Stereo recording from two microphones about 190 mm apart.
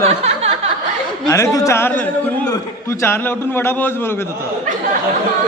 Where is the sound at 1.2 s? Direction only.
15° left (ahead or behind).